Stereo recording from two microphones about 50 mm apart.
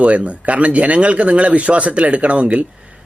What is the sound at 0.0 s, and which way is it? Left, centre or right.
Speech, right.